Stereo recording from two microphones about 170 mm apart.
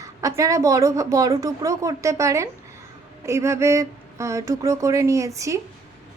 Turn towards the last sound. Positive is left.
turn(degrees=-20)  # may be behind; listen again after turning